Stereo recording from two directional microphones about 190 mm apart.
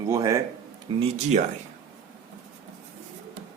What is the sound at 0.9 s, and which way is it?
Speech, 25° right (ahead or behind).